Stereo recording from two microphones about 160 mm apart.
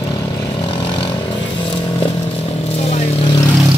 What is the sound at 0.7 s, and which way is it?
Vehicle, 30° left (ahead or behind).